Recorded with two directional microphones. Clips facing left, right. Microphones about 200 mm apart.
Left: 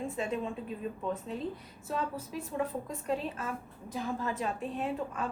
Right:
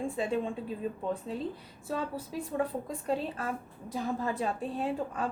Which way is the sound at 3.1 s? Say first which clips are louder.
Right 2 dB; 35° right (ahead or behind).